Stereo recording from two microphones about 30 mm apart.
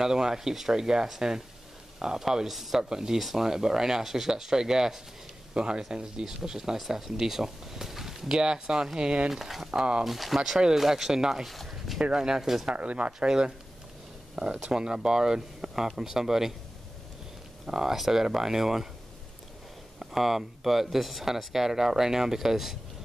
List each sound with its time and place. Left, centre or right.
0.0 s speech: centre
1.2 s speech: right
2.4 s speech: centre
2.8 s speech: right
8.4 s speech: right
9.3 s speech: centre
9.7 s speech: right
10.0 s speech: centre
11.4 s speech: centre
12.1 s speech: right
12.7 s speech: right
14.6 s speech: right
17.6 s speech: centre
20.0 s speech: centre